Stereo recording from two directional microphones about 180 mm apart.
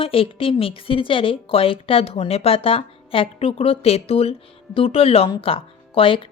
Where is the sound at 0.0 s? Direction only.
30° left (ahead or behind).